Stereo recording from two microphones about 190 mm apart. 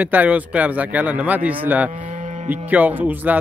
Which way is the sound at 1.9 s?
45° right (ahead or behind).